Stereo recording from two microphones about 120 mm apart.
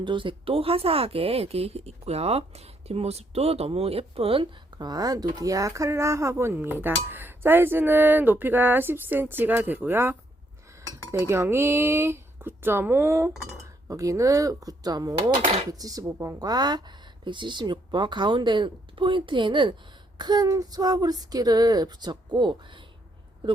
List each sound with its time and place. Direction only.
0.0 s speech: 45° right (ahead or behind)
4.8 s speech: 35° right (ahead or behind)